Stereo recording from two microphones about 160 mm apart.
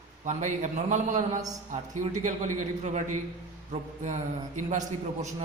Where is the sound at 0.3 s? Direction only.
50° right (ahead or behind).